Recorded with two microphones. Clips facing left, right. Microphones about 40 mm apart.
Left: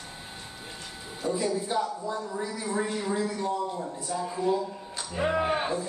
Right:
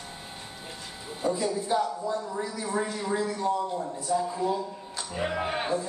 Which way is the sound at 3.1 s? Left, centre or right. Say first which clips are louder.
Right 1 dB; centre.